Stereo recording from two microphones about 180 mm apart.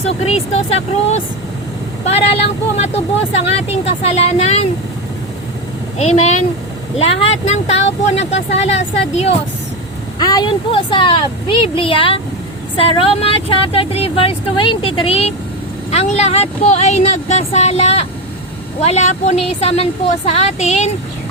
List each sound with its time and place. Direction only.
0.3 s speech: 35° left (ahead or behind)
6.0 s speech: 35° left (ahead or behind)
10.2 s speech: 20° left (ahead or behind); by 20.9 s 40° left (ahead or behind)